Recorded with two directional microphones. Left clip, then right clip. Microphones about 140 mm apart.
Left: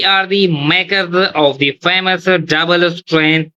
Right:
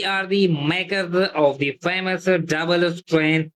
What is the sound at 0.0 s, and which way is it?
Speech, 15° left (ahead or behind).